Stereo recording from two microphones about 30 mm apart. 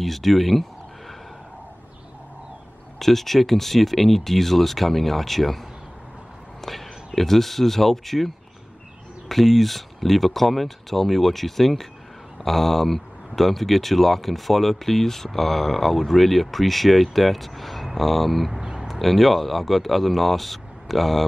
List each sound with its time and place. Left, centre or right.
0.0 s speech: centre
3.0 s speech: centre
6.6 s a sound: centre
7.2 s speech: centre
9.3 s speech: centre
18.6 s a sound: centre
18.9 s speech: centre